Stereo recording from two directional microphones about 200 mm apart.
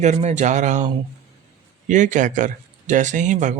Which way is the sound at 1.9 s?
40° right (ahead or behind).